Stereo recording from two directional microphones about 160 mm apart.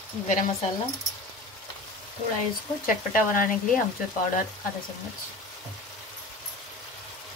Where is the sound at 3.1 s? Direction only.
55° left (ahead or behind).